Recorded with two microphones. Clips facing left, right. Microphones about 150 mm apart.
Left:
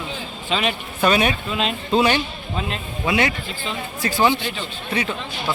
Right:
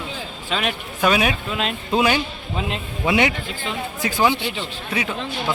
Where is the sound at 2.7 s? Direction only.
20° right (ahead or behind).